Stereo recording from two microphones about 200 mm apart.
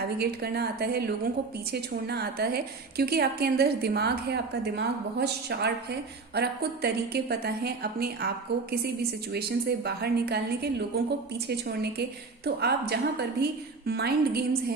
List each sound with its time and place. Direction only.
0.2 s a woman's voice: 50° right (ahead or behind)
9.3 s a woman's voice: 55° right (ahead or behind)